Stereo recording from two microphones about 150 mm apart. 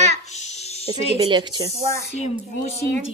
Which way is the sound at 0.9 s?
40° left (ahead or behind).